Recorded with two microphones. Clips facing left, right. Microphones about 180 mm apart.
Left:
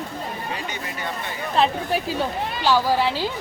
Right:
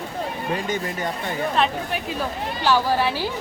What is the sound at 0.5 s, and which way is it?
Speech, 45° right (ahead or behind).